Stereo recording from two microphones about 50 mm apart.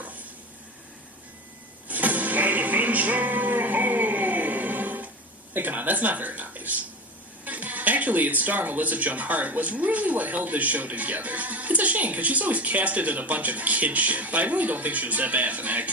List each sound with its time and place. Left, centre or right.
0.0 s stir: right
1.9 s music: right
5.5 s speech: right